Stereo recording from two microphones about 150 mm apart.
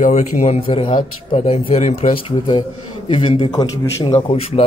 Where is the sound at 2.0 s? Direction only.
35° left (ahead or behind).